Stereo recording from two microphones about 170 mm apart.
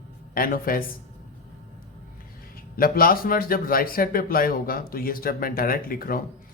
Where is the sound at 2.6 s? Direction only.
60° left (ahead or behind).